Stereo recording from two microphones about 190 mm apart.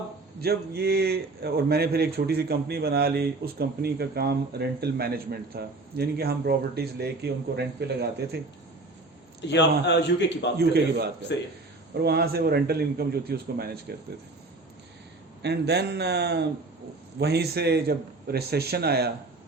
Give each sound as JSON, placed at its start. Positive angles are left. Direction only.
{"t": 0.3, "sound": "a man's voice", "side_deg": -55}
{"t": 9.5, "sound": "a man's voice", "side_deg": 65}
{"t": 11.9, "sound": "a man's voice", "side_deg": -55}
{"t": 15.4, "sound": "a man's voice", "side_deg": -60}